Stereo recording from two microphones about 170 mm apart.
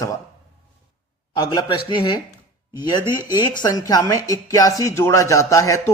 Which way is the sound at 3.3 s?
25° left (ahead or behind).